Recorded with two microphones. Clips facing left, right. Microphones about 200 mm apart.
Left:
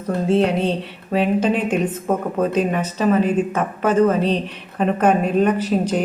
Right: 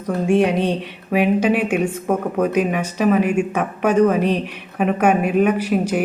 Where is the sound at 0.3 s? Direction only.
15° right (ahead or behind).